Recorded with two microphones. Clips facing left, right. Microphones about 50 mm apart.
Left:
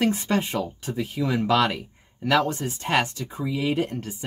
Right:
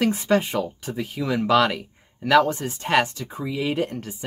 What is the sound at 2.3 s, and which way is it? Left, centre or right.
Speech, centre.